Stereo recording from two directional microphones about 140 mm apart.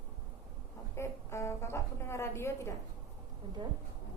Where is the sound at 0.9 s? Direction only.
20° left (ahead or behind).